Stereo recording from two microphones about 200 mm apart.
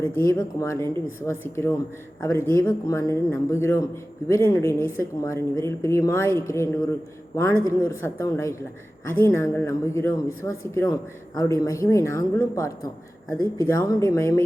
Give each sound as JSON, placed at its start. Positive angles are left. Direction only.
{"t": 0.0, "sound": "a woman's voice", "side_deg": 15}